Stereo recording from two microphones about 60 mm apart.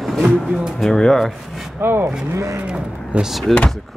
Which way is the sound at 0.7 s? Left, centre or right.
Centre.